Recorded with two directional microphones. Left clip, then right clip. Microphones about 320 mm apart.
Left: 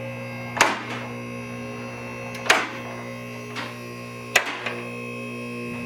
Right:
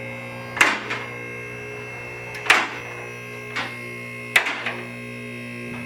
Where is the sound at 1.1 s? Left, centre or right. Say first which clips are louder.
Right 2 dB; centre.